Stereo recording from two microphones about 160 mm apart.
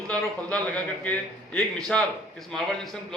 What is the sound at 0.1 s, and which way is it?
A man's voice, 10° left (ahead or behind).